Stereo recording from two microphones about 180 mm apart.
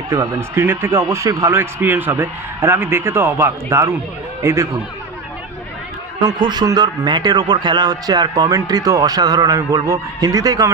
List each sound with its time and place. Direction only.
0.1 s a man's voice: 15° right (ahead or behind)
6.2 s a man's voice: 25° right (ahead or behind)